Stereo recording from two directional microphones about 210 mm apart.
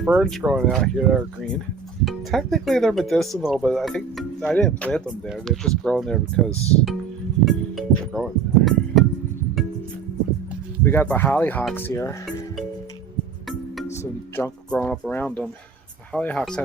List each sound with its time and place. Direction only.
0.0 s speech: centre (ahead or behind)
6.5 s speech: 30° left (ahead or behind)
7.4 s music: centre (ahead or behind)
10.8 s speech: 10° left (ahead or behind)
14.0 s speech: 10° left (ahead or behind)